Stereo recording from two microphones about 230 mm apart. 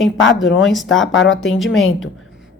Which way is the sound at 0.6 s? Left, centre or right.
Centre.